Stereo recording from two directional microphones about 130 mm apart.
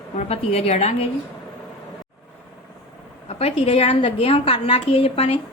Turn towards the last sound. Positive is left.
turn(degrees=50)  # may be behind; listen again after turning